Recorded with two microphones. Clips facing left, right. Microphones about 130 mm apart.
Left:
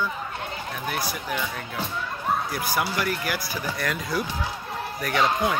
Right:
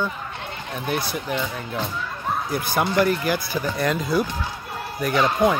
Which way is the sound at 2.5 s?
25° right (ahead or behind).